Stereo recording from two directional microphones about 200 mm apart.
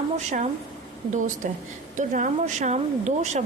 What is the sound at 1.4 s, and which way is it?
A woman's voice, 40° right (ahead or behind).